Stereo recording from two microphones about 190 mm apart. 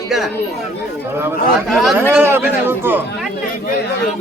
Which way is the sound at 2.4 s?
10° right (ahead or behind).